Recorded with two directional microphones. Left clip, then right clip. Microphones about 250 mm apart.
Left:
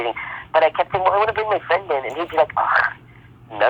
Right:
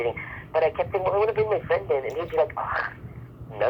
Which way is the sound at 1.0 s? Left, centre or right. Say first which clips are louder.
Left 5 dB; left.